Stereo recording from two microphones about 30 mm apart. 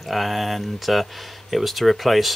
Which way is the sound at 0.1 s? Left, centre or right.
Centre.